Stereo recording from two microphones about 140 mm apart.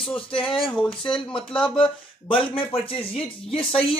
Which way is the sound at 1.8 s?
40° left (ahead or behind).